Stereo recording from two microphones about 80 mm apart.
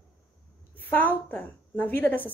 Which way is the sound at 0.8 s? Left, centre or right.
Left.